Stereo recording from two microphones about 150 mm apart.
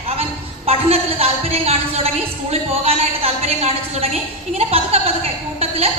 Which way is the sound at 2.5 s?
45° right (ahead or behind).